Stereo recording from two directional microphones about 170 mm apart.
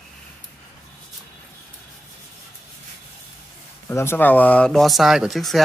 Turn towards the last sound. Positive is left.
turn(degrees=0)  # may be behind; listen again after turning